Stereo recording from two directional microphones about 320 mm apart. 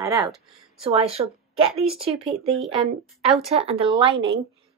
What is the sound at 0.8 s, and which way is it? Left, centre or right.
A woman's voice, centre.